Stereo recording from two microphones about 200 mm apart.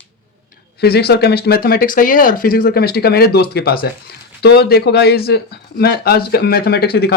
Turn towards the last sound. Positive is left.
turn(degrees=55)  # may be behind; listen again after turning